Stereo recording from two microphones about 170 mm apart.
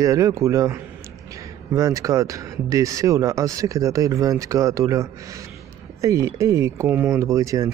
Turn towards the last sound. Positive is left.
turn(degrees=-20)  # may be behind; listen again after turning